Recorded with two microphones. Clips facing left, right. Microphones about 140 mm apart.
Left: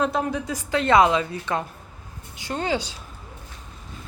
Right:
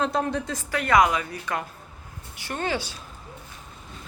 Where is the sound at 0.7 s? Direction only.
25° left (ahead or behind).